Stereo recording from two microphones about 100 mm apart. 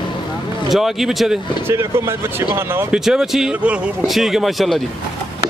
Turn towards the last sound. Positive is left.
turn(degrees=0)  # may be behind; listen again after turning